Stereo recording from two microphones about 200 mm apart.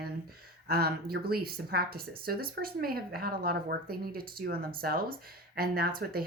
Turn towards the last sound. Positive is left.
turn(degrees=-50)  # may be behind; listen again after turning